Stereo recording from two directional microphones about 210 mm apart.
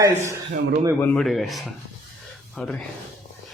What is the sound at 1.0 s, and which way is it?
Speech, centre (ahead or behind).